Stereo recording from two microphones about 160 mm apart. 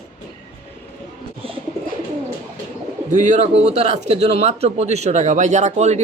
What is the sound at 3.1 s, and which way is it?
Speech, 50° right (ahead or behind).